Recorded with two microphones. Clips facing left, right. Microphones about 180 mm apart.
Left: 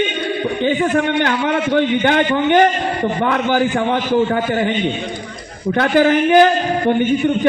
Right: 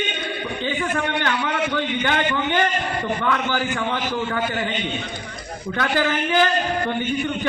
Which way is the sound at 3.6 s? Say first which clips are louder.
Left 8 dB; 55° left (ahead or behind).